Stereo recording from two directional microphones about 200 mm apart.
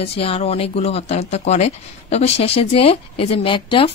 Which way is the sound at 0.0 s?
30° left (ahead or behind).